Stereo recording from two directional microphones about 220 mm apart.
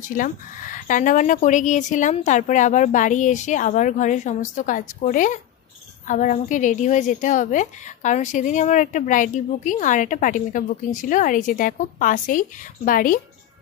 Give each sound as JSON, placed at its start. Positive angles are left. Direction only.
{"t": 0.0, "sound": "a woman's voice", "side_deg": 35}